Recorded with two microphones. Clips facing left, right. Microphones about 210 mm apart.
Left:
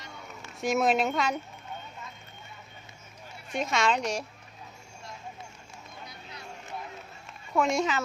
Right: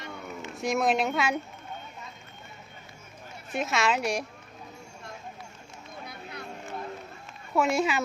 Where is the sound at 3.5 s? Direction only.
5° right (ahead or behind).